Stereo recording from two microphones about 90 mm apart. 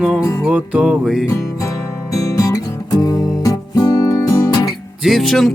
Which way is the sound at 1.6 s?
35° left (ahead or behind).